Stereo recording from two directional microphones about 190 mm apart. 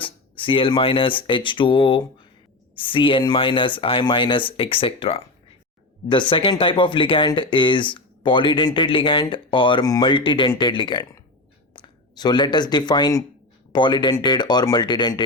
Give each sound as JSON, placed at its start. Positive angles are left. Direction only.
{"t": 0.0, "sound": "speech", "side_deg": 25}